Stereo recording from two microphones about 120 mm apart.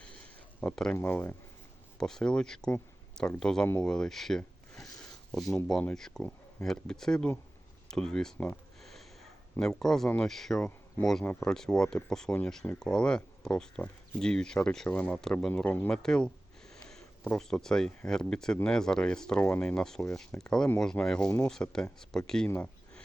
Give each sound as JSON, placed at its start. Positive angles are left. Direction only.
{"t": 0.6, "sound": "speech", "side_deg": 10}
{"t": 2.0, "sound": "speech", "side_deg": 5}
{"t": 8.8, "sound": "snort", "side_deg": 0}
{"t": 9.6, "sound": "speech", "side_deg": 5}
{"t": 11.2, "sound": "speech", "side_deg": 15}
{"t": 22.4, "sound": "a sound", "side_deg": 15}